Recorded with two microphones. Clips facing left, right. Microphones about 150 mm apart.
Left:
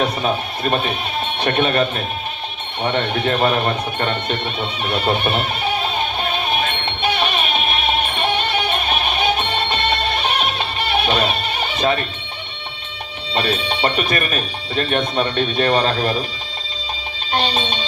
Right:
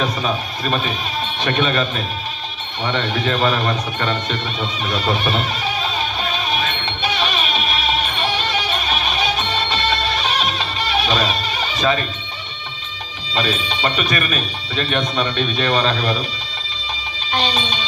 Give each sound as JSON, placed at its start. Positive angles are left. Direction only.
{"t": 0.0, "sound": "speech", "side_deg": 60}
{"t": 2.8, "sound": "music", "side_deg": 55}
{"t": 13.3, "sound": "speech", "side_deg": 55}
{"t": 17.3, "sound": "speech", "side_deg": 50}